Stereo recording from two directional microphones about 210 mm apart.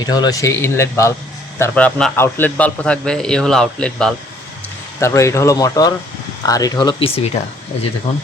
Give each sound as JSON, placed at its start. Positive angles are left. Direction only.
{"t": 0.0, "sound": "a man's voice", "side_deg": 20}